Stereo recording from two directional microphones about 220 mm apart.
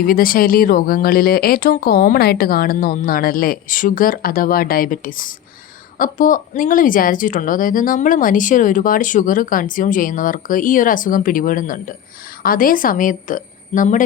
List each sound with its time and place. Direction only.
0.0 s speech: 40° left (ahead or behind)